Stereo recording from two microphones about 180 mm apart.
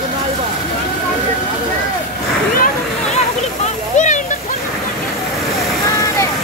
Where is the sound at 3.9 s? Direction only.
45° left (ahead or behind).